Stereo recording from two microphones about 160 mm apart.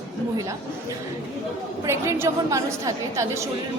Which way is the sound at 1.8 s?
15° right (ahead or behind).